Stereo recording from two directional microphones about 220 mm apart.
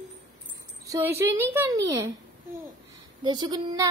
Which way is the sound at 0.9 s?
10° right (ahead or behind).